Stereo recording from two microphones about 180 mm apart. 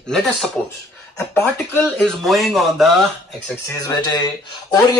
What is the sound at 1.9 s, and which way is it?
Speech, centre (ahead or behind).